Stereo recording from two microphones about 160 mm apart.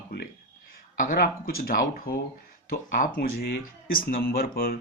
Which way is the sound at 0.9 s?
60° left (ahead or behind).